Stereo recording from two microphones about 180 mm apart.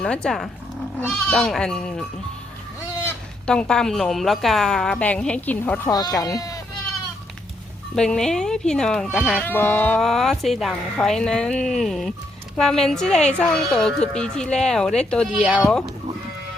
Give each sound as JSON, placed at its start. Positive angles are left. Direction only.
{"t": 0.0, "sound": "speech", "side_deg": 5}
{"t": 5.9, "sound": "speech", "side_deg": 20}
{"t": 7.9, "sound": "speech", "side_deg": 5}